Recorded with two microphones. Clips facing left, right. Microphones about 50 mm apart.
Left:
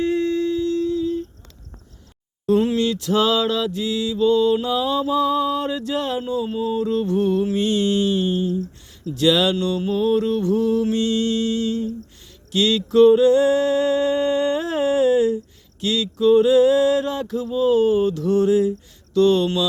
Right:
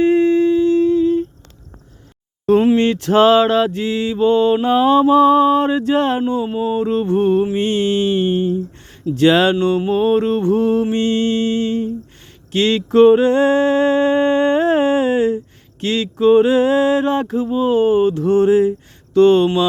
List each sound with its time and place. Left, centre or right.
0.0 s humming: right
2.7 s mantra: right